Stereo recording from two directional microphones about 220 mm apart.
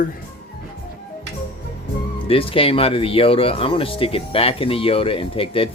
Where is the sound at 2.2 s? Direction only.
25° left (ahead or behind).